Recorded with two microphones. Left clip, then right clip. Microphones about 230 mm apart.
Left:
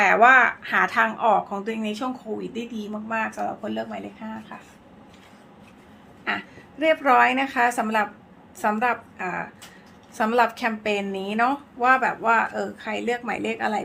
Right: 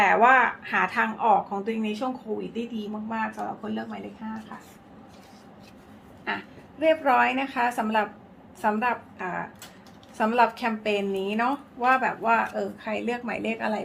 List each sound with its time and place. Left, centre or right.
0.0 s a woman's voice: left
6.2 s a woman's voice: left